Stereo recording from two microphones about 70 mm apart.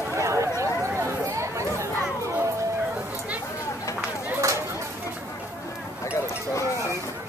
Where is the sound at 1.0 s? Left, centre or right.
Right.